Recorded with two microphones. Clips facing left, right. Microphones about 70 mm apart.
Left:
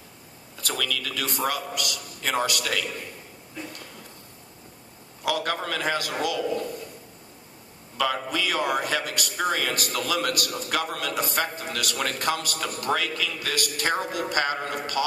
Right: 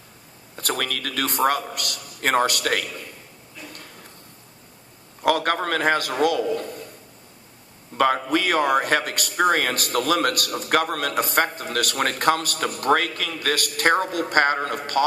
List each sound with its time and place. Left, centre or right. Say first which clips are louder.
0.5 s a man's voice: right 3 dB; right
5.2 s a man's voice: right 6 dB; right
7.9 s a man's voice: right 6 dB; right